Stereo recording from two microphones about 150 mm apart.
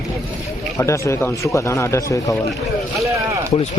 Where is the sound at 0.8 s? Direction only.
20° left (ahead or behind).